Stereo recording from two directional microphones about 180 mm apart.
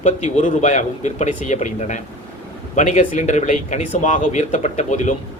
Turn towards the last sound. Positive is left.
turn(degrees=40)  # may be behind; listen again after turning